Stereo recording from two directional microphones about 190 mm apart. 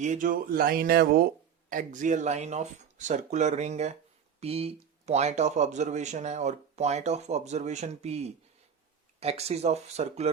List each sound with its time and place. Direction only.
0.0 s speech: 40° right (ahead or behind)
1.7 s a man's voice: 45° right (ahead or behind)